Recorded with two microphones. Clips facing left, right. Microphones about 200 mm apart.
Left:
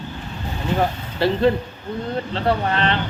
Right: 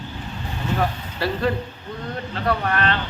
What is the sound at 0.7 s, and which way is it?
Speech, 25° left (ahead or behind).